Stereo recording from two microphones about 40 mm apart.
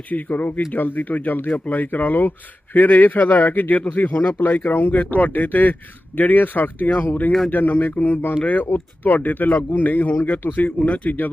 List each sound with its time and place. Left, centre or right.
0.1 s speech: left